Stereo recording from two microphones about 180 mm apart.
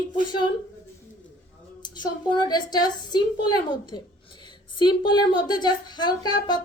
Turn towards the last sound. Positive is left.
turn(degrees=25)  # may be behind; listen again after turning